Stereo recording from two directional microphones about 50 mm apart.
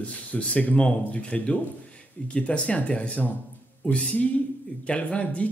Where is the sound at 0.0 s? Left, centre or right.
Left.